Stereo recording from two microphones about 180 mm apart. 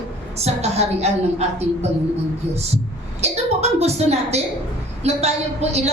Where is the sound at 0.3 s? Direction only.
35° right (ahead or behind).